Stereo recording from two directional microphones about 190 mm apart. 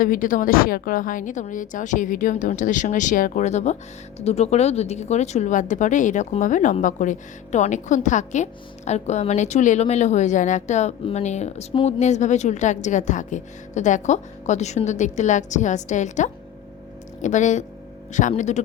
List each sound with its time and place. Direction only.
0.0 s a woman's voice: 45° left (ahead or behind)